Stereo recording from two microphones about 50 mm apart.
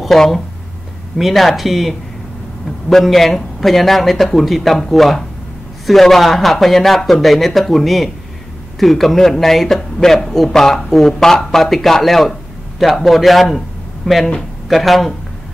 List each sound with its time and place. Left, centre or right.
0.0 s a man's voice: centre